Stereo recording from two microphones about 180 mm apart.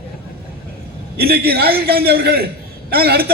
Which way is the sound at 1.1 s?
60° right (ahead or behind).